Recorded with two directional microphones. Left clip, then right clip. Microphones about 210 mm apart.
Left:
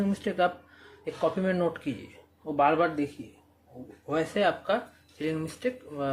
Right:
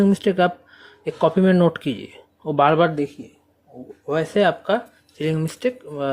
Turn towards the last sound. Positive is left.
turn(degrees=-45)  # may be behind; listen again after turning